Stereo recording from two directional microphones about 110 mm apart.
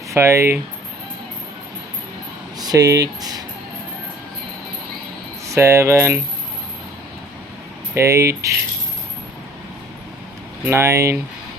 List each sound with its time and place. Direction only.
0.1 s speech: 25° right (ahead or behind)
2.6 s speech: 35° right (ahead or behind)
5.5 s speech: 25° right (ahead or behind)
7.9 s speech: 25° right (ahead or behind)
10.7 s speech: 25° right (ahead or behind)